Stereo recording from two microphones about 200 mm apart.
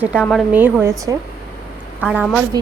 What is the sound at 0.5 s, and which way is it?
Speech, 10° right (ahead or behind).